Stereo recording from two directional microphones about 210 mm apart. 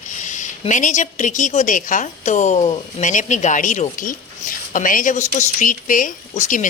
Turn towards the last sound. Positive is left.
turn(degrees=40)  # may be behind; listen again after turning